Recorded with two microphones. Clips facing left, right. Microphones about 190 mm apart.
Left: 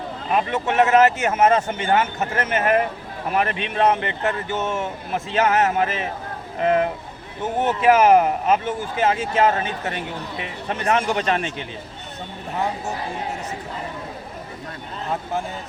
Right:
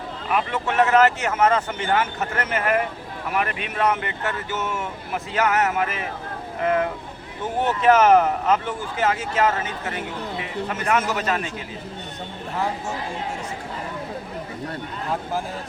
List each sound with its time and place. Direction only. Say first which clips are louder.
0.3 s speech: left 2 dB; 25° left (ahead or behind)